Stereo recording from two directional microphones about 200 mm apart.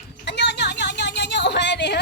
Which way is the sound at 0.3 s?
60° left (ahead or behind).